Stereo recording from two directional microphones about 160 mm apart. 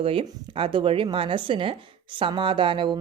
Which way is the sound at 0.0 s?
35° right (ahead or behind).